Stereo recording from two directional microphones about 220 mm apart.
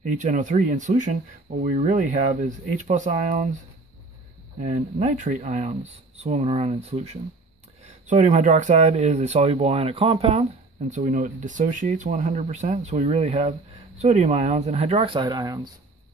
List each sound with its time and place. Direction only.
0.2 s speech: 35° right (ahead or behind)
4.6 s speech: 35° right (ahead or behind); by 15.7 s 15° right (ahead or behind)